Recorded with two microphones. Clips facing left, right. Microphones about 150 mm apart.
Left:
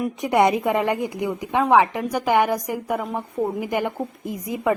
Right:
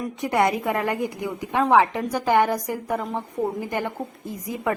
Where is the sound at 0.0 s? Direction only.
20° left (ahead or behind).